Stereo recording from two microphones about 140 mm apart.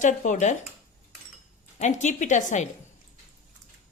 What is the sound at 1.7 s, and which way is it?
Speech, 60° left (ahead or behind).